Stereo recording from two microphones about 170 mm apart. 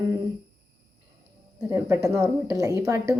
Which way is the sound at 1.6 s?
15° right (ahead or behind).